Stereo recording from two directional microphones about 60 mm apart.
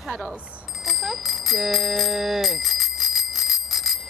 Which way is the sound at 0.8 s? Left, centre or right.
Centre.